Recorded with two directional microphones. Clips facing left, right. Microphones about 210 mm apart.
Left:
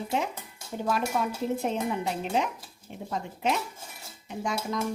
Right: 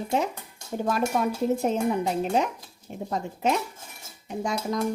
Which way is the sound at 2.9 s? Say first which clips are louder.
Right 5 dB; 40° right (ahead or behind).